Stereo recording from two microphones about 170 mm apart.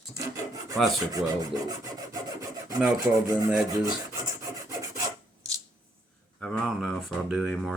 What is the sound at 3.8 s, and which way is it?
Rub, 20° right (ahead or behind).